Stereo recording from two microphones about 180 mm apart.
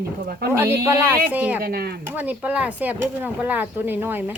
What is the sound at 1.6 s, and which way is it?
Speech, 55° right (ahead or behind).